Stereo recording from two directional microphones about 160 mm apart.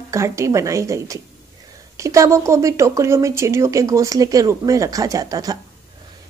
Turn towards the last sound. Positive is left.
turn(degrees=-25)  # may be behind; listen again after turning